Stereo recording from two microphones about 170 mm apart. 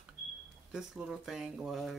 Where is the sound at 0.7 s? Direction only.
5° right (ahead or behind).